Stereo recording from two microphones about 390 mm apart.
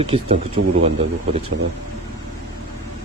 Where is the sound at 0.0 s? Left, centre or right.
Centre.